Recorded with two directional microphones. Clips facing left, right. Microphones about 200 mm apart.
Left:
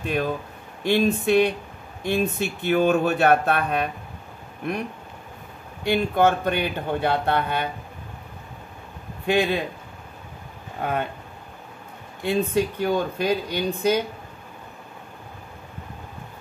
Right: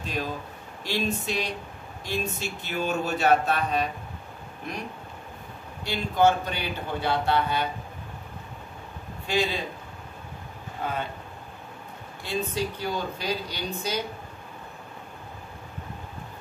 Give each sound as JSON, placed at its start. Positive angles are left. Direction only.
{"t": 0.0, "sound": "speech", "side_deg": 60}
{"t": 5.9, "sound": "speech", "side_deg": 55}
{"t": 9.2, "sound": "speech", "side_deg": 60}
{"t": 10.8, "sound": "speech", "side_deg": 60}
{"t": 12.2, "sound": "speech", "side_deg": 55}